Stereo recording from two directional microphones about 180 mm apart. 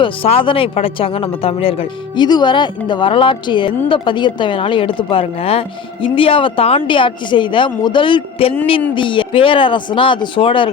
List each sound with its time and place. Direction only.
0.0 s speech: 30° left (ahead or behind)